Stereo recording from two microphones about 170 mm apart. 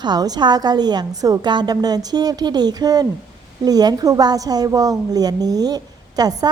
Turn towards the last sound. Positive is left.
turn(degrees=-25)  # may be behind; listen again after turning